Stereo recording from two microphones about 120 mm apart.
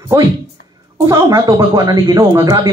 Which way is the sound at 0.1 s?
30° right (ahead or behind).